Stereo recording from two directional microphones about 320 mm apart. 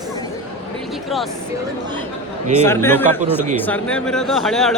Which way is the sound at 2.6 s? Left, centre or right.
Centre.